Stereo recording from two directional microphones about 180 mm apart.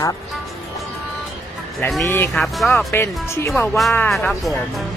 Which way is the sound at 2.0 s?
10° left (ahead or behind).